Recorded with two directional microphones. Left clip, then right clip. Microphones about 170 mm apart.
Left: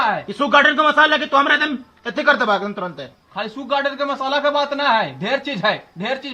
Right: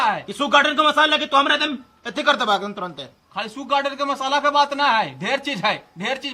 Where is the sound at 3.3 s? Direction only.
Centre (ahead or behind).